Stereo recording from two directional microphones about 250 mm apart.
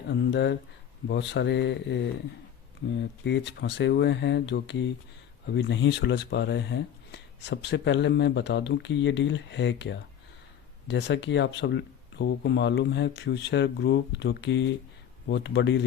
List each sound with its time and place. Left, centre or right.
0.1 s speech: left
3.2 s speech: left